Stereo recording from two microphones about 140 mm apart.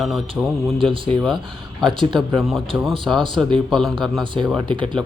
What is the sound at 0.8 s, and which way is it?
Speech, 40° right (ahead or behind).